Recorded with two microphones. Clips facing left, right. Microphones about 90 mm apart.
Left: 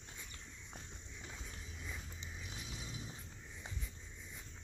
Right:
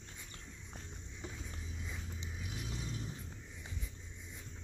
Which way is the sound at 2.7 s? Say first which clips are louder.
Right 6 dB; 5° left (ahead or behind).